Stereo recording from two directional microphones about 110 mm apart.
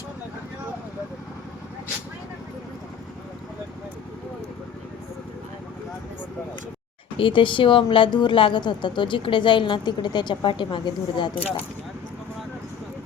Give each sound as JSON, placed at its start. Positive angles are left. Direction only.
{"t": 7.2, "sound": "a woman's voice", "side_deg": 50}